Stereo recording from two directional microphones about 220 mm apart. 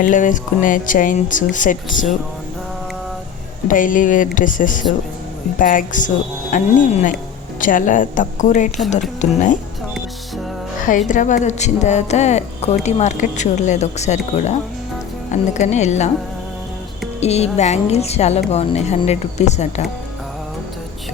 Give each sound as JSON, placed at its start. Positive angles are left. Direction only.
{"t": 0.0, "sound": "speech", "side_deg": 35}
{"t": 3.7, "sound": "speech", "side_deg": 35}
{"t": 11.1, "sound": "speech", "side_deg": 35}
{"t": 17.2, "sound": "a woman's voice", "side_deg": 30}